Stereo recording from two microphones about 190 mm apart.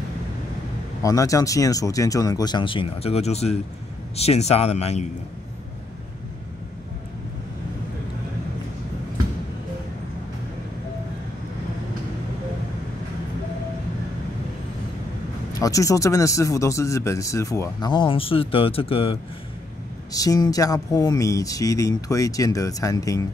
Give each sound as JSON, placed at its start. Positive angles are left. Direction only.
{"t": 1.0, "sound": "speech", "side_deg": 15}
{"t": 15.6, "sound": "speech", "side_deg": 15}
{"t": 20.1, "sound": "speech", "side_deg": 20}